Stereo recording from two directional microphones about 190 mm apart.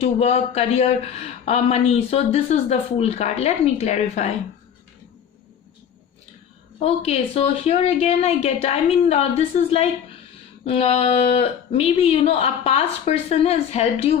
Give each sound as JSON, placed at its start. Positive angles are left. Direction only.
{"t": 0.0, "sound": "speech", "side_deg": 35}
{"t": 6.7, "sound": "speech", "side_deg": 30}